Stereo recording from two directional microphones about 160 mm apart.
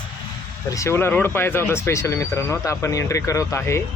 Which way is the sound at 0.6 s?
20° left (ahead or behind).